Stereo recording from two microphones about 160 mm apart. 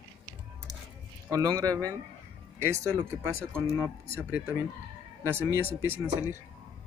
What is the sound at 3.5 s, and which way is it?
Speech, 15° right (ahead or behind).